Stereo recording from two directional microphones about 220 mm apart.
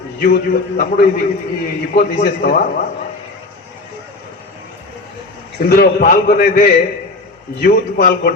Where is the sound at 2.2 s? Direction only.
45° left (ahead or behind).